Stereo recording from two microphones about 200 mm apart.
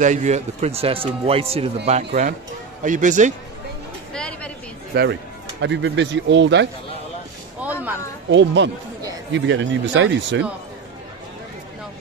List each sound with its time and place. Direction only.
0.0 s speech: 35° right (ahead or behind)
2.8 s speech: 40° right (ahead or behind)
4.1 s a sound: 5° left (ahead or behind)
4.9 s speech: 50° right (ahead or behind)
5.6 s speech: 65° right (ahead or behind)
7.6 s a sound: 10° right (ahead or behind)
8.3 s speech: 65° right (ahead or behind)